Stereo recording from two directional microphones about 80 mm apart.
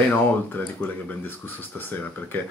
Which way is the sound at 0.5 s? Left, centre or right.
Left.